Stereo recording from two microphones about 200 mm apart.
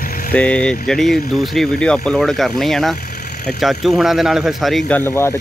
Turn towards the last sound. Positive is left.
turn(degrees=10)  # may be behind; listen again after turning